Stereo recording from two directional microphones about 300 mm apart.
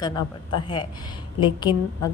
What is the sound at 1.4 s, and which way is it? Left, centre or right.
Speech, centre.